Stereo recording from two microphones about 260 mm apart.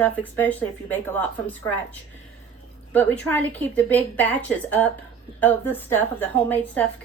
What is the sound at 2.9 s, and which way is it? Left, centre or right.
A woman's voice, centre.